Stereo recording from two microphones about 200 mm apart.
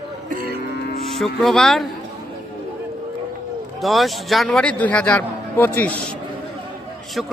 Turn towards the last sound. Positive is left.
turn(degrees=0)  # may be behind; listen again after turning